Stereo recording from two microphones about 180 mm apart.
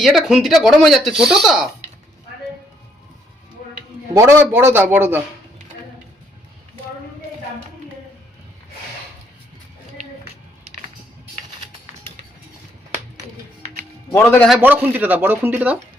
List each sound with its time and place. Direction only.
0.0 s speech: 5° right (ahead or behind)
4.1 s a man's voice: 15° right (ahead or behind)
14.1 s a man's voice: 15° left (ahead or behind)
14.6 s speech: 10° right (ahead or behind)